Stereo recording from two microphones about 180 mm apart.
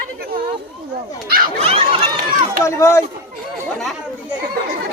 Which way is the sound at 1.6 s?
35° right (ahead or behind).